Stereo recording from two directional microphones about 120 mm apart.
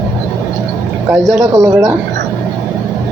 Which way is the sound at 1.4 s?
30° right (ahead or behind).